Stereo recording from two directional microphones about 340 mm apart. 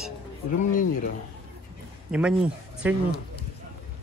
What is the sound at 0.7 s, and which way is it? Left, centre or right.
Speech, left.